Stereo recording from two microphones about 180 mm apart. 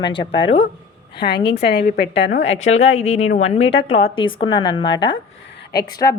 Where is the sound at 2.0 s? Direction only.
75° left (ahead or behind).